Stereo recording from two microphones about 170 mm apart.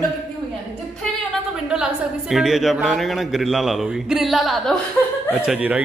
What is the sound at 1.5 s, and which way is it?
A woman's voice, 5° right (ahead or behind).